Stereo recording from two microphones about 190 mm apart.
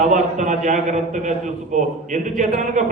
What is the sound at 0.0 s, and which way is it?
A man's voice, 40° right (ahead or behind).